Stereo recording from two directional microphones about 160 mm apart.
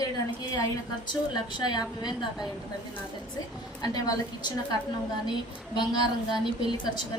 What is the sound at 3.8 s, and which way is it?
Speech, 25° left (ahead or behind).